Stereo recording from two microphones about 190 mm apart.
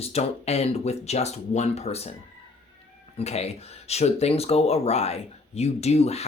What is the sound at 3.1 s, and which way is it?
Speech, 35° left (ahead or behind).